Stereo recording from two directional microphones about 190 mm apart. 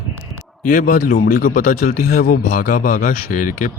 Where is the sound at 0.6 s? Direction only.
45° left (ahead or behind).